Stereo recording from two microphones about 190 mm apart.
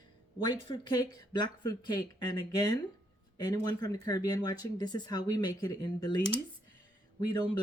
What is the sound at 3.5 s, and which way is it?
Speech, 20° left (ahead or behind).